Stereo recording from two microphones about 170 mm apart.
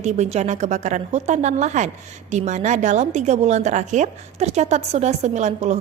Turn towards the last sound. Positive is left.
turn(degrees=-40)  # may be behind; listen again after turning